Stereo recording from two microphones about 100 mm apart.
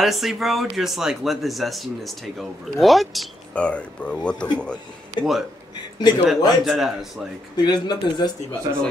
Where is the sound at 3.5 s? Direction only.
10° left (ahead or behind).